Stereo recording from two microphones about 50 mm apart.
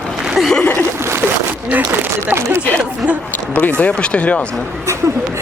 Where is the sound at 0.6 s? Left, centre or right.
Left.